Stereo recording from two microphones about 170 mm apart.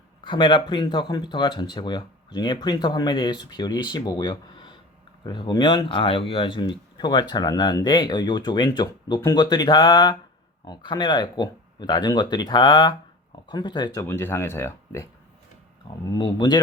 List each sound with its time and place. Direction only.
0.3 s speech: 25° left (ahead or behind)
14.0 s speech: 15° left (ahead or behind)
16.0 s speech: 25° left (ahead or behind)